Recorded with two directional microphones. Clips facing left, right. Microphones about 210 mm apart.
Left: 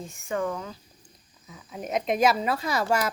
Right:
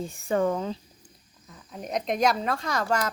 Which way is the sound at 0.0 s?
35° right (ahead or behind).